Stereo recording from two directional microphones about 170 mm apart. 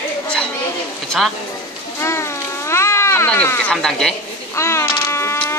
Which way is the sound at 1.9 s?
15° left (ahead or behind).